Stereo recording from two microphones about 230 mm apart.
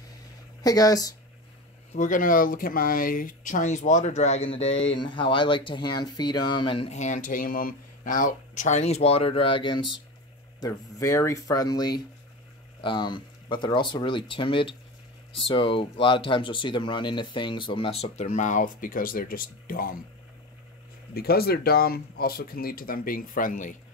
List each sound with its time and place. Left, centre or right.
0.6 s speech: centre
2.0 s speech: left
21.1 s speech: left